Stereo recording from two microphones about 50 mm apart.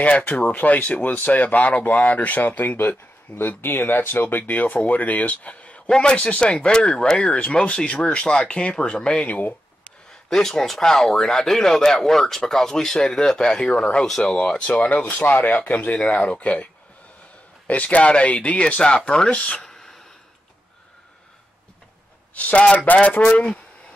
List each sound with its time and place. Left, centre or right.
0.0 s speech: left
9.2 s speech: left
10.3 s speech: centre
14.0 s speech: centre
14.7 s speech: left
17.6 s speech: left
19.6 s a sound: centre
22.3 s speech: left